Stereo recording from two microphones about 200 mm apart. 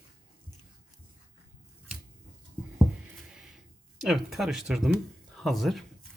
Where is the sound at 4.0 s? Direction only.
Centre (ahead or behind).